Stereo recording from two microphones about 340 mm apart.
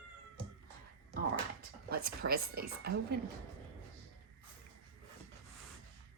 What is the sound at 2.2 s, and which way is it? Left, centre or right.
Speech, right.